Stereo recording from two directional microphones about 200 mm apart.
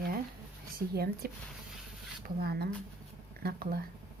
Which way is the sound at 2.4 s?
50° right (ahead or behind).